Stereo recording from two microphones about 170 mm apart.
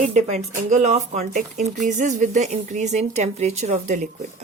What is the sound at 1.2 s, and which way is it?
Speech, 50° right (ahead or behind).